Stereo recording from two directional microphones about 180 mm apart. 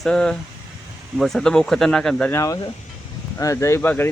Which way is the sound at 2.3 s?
15° left (ahead or behind).